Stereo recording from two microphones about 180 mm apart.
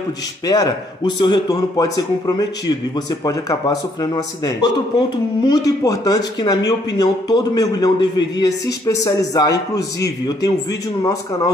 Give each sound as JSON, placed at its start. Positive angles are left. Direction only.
{"t": 0.5, "sound": "a man's voice", "side_deg": 20}